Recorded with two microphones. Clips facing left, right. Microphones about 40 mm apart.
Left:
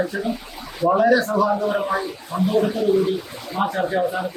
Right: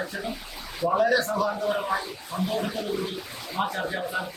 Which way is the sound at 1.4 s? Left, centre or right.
Centre.